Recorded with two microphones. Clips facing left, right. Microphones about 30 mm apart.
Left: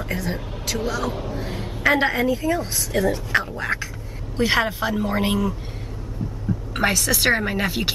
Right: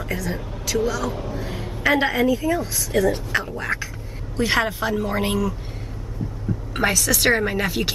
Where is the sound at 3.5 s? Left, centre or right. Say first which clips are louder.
Even; centre.